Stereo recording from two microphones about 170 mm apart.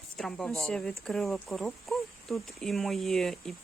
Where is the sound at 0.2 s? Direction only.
5° left (ahead or behind).